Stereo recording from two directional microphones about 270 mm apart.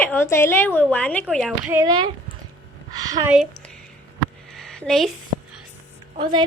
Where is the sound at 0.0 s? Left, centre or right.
Centre.